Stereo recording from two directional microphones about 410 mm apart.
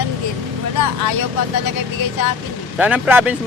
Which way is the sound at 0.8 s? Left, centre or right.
Left.